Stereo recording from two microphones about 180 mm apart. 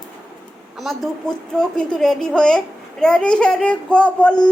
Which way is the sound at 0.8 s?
Centre (ahead or behind).